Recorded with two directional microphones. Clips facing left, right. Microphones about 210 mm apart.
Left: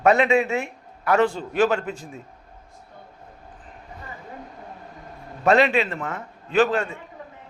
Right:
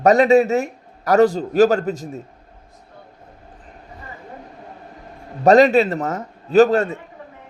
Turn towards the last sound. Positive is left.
turn(degrees=-40)  # may be behind; listen again after turning